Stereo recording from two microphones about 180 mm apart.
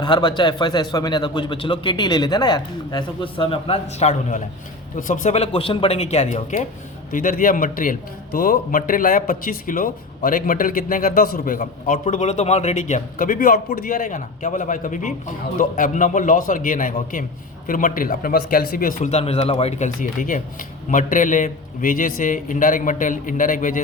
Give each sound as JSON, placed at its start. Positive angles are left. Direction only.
{"t": 0.0, "sound": "a man's voice", "side_deg": 25}